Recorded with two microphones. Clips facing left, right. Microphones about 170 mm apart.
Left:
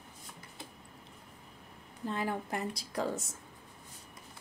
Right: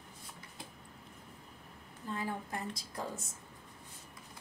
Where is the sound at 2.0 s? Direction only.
70° left (ahead or behind).